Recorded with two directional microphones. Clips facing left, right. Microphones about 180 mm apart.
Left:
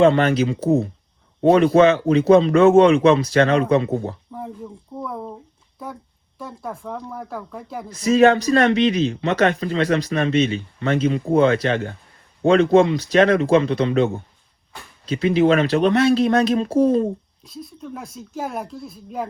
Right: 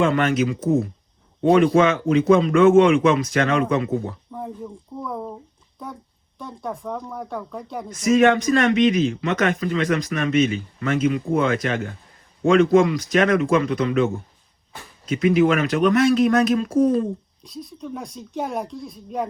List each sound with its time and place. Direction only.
0.0 s speech: 30° left (ahead or behind)
4.3 s a sound: centre (ahead or behind)
5.0 s a woman's voice: centre (ahead or behind)
7.9 s speech: 30° left (ahead or behind)
17.4 s a woman's voice: centre (ahead or behind)